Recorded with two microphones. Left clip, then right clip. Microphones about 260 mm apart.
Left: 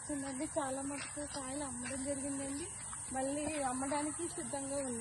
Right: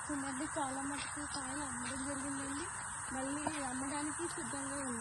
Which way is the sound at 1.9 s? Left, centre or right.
Centre.